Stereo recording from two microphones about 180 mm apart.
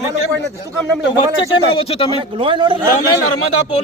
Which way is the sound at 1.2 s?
30° left (ahead or behind).